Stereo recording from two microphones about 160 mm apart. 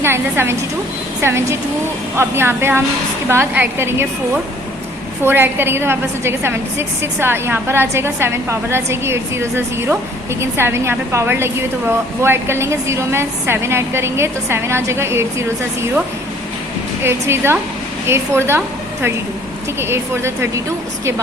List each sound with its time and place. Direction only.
0.0 s a woman's voice: 15° right (ahead or behind)
5.2 s a woman's voice: 15° right (ahead or behind)
19.8 s a woman's voice: 15° right (ahead or behind)